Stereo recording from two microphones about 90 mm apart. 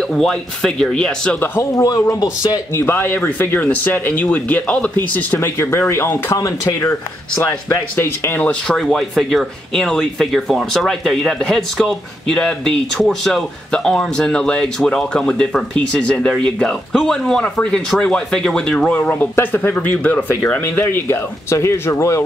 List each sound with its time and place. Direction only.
0.1 s speech: 5° left (ahead or behind)
1.4 s speech: 25° left (ahead or behind)
1.8 s speech: 40° left (ahead or behind)
2.7 s speech: 25° left (ahead or behind)
8.5 s speech: 5° left (ahead or behind)
18.9 s speech: 15° left (ahead or behind)